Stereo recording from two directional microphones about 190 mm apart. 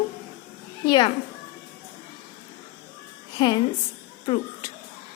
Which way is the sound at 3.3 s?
25° left (ahead or behind).